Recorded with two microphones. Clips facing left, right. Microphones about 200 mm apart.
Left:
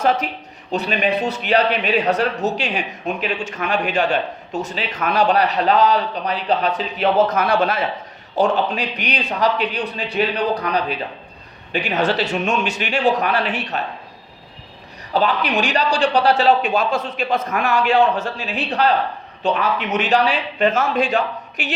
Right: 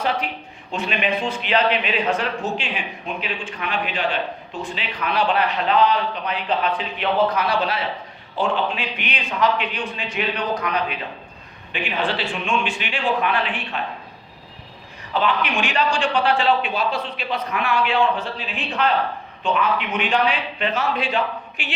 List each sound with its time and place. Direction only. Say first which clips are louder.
0.0 s a man's voice: left 5 dB; 45° left (ahead or behind)
15.1 s a man's voice: left 3 dB; 40° left (ahead or behind)